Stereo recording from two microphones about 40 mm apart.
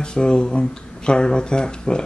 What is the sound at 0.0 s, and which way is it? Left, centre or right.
Speech, left.